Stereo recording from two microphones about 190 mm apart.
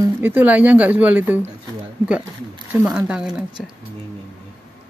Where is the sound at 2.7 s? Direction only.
10° right (ahead or behind).